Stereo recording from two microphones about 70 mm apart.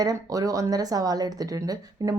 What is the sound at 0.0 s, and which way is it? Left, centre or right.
Speech, right.